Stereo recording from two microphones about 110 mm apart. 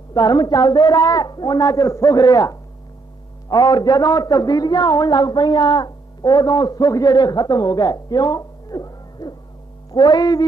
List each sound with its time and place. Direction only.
0.1 s a man's voice: 40° left (ahead or behind)
9.8 s music: 40° left (ahead or behind)